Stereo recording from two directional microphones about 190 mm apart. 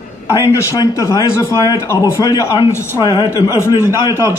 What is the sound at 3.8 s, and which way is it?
Speech, 15° right (ahead or behind).